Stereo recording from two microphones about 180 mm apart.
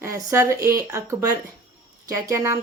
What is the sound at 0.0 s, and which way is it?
Speech, 15° right (ahead or behind).